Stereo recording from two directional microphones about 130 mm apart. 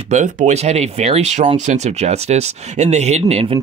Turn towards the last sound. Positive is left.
turn(degrees=-45)  # may be behind; listen again after turning